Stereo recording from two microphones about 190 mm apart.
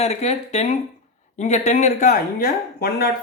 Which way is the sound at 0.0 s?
35° left (ahead or behind).